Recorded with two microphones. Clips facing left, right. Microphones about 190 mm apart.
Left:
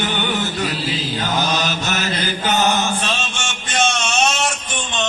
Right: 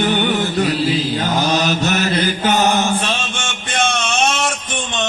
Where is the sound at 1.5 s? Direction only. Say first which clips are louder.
Right 5 dB; 35° right (ahead or behind).